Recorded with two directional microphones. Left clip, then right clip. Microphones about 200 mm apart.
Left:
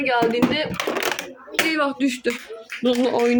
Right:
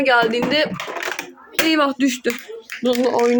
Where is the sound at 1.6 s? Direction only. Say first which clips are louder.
Right 5 dB; 35° right (ahead or behind).